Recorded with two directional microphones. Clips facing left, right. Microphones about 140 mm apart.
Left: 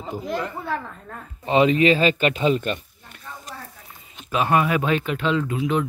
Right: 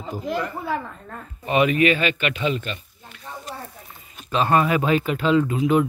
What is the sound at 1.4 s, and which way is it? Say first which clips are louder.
Speech: left 1 dB; 25° left (ahead or behind).